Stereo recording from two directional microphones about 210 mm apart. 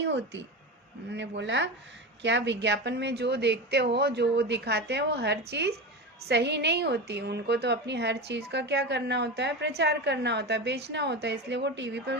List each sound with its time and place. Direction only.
0.0 s a woman's voice: 55° right (ahead or behind)